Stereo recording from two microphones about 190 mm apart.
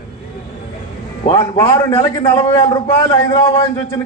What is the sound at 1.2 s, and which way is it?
A man's voice, 20° left (ahead or behind).